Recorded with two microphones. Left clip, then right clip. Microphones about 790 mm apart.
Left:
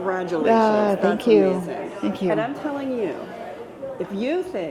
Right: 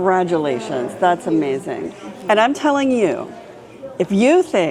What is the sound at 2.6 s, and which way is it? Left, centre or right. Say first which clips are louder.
Speech: right 11 dB; right.